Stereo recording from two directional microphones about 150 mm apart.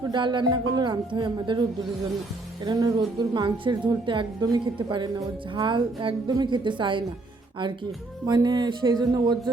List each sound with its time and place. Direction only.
0.0 s a woman's voice: 30° right (ahead or behind)
2.6 s a woman's voice: 25° right (ahead or behind)
8.3 s speech: 30° right (ahead or behind)